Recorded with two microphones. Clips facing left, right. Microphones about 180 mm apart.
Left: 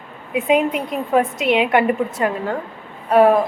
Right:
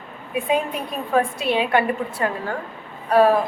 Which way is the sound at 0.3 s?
20° left (ahead or behind).